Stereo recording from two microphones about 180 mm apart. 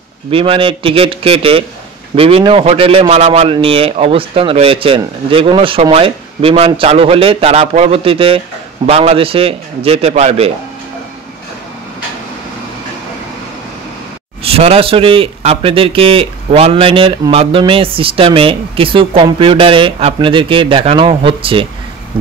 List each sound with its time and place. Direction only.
0.3 s speech: 30° right (ahead or behind)
14.4 s speech: 35° right (ahead or behind)
22.1 s a sound: 30° right (ahead or behind)